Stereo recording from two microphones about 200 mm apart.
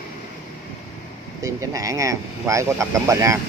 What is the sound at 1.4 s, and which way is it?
Speech, 15° right (ahead or behind).